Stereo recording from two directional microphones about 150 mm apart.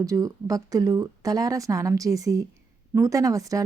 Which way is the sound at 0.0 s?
20° right (ahead or behind).